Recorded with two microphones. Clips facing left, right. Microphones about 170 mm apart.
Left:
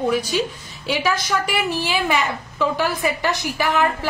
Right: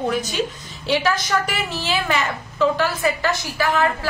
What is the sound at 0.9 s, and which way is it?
A woman's voice, 10° left (ahead or behind).